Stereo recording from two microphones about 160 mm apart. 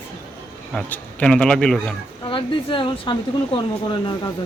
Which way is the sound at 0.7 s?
5° left (ahead or behind).